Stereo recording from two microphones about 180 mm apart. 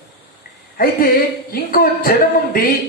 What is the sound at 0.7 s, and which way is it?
Speech, 55° left (ahead or behind).